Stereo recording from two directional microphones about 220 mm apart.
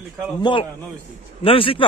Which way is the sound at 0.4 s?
20° left (ahead or behind).